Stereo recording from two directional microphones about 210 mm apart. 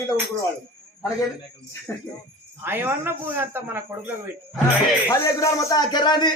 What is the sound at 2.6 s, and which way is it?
Speech, 10° right (ahead or behind).